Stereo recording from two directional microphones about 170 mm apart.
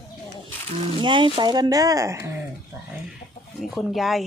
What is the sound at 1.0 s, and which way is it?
Speech, 30° right (ahead or behind).